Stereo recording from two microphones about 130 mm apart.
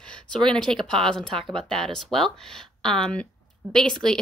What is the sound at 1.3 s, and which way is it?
Speech, 45° right (ahead or behind).